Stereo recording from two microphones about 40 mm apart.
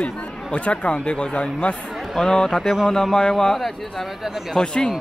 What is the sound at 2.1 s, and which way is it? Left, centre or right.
Speech, centre.